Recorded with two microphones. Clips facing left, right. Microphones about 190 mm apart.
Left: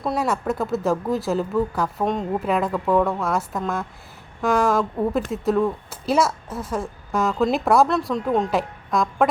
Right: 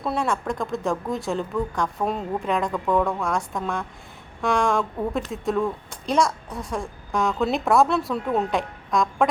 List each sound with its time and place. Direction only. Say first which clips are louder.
0.0 s speech: left 2 dB; 5° left (ahead or behind)